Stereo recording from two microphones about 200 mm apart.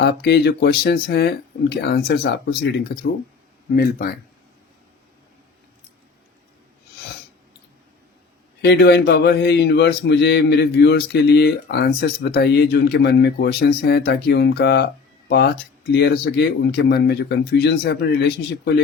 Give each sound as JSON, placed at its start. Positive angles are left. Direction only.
{"t": 0.0, "sound": "speech", "side_deg": 55}
{"t": 8.6, "sound": "speech", "side_deg": 55}